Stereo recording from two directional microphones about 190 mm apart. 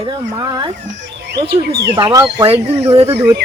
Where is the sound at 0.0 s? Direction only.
20° right (ahead or behind).